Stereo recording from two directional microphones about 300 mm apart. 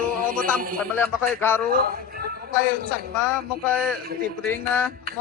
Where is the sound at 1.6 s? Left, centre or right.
Right.